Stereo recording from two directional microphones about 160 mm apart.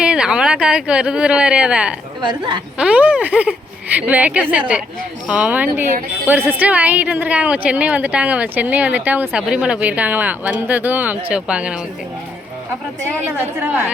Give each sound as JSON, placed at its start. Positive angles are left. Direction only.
{"t": 0.0, "sound": "speech", "side_deg": -5}
{"t": 2.2, "sound": "a woman's voice", "side_deg": -30}
{"t": 2.7, "sound": "a woman's voice", "side_deg": -5}
{"t": 13.1, "sound": "a woman's voice", "side_deg": -15}